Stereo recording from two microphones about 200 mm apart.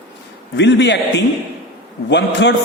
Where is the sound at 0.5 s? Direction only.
60° left (ahead or behind).